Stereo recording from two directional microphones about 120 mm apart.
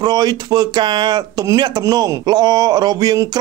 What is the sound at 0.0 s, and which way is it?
Speech, 35° right (ahead or behind).